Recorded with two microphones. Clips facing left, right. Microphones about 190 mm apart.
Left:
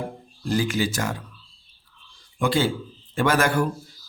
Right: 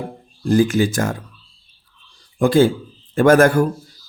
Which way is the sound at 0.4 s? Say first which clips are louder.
Right 8 dB; 50° right (ahead or behind).